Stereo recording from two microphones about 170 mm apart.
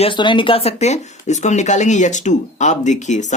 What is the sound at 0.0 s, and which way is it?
Speech, 30° left (ahead or behind).